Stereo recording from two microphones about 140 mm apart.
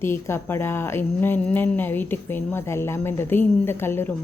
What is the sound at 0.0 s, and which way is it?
Speech, 15° left (ahead or behind).